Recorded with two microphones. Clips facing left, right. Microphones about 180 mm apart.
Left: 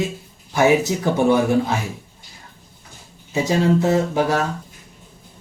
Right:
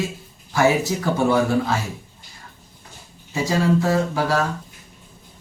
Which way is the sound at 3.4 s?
20° left (ahead or behind).